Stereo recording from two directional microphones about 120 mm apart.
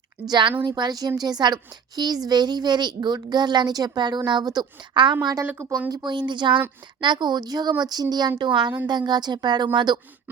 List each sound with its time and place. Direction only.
0.3 s speech: 40° right (ahead or behind)
5.2 s a woman's voice: 25° right (ahead or behind)
6.1 s speech: 40° right (ahead or behind)